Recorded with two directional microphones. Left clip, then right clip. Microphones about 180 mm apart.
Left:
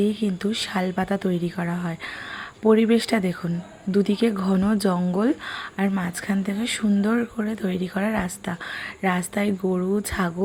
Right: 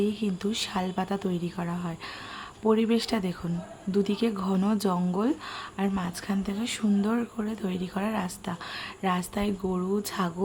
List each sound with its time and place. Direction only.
0.0 s speech: 15° left (ahead or behind)